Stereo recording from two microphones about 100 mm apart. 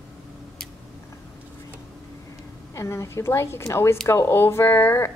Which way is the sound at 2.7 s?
30° left (ahead or behind).